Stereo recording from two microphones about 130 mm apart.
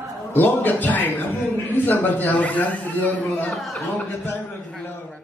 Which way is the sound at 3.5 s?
Centre (ahead or behind).